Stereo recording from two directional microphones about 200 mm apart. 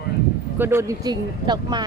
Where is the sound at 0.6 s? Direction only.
10° right (ahead or behind).